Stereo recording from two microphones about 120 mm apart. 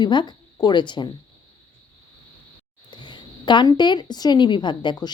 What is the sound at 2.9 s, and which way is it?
A woman's voice, 40° left (ahead or behind).